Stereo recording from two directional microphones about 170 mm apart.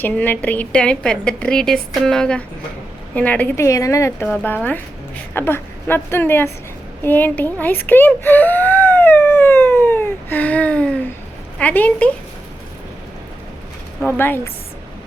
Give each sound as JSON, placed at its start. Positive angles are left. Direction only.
{"t": 0.0, "sound": "a woman's voice", "side_deg": 10}
{"t": 7.0, "sound": "whimper", "side_deg": 10}
{"t": 11.6, "sound": "a woman's voice", "side_deg": 10}
{"t": 14.2, "sound": "a woman's voice", "side_deg": 15}